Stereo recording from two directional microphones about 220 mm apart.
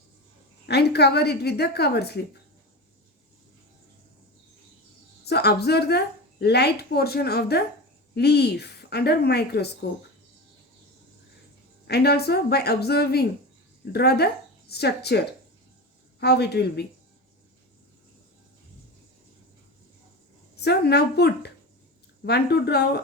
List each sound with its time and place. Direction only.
0.7 s a woman's voice: 50° left (ahead or behind)
5.2 s a woman's voice: 45° left (ahead or behind)
11.9 s a woman's voice: 45° left (ahead or behind)
16.2 s a woman's voice: 50° left (ahead or behind)
20.6 s a woman's voice: 50° left (ahead or behind)